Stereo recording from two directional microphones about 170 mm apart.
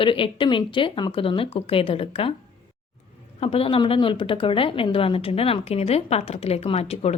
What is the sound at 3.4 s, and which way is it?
A woman's voice, 35° left (ahead or behind).